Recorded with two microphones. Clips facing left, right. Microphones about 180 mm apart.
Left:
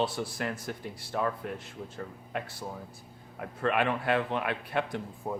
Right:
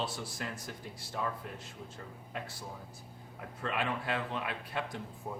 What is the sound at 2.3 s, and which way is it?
A man's voice, 65° left (ahead or behind).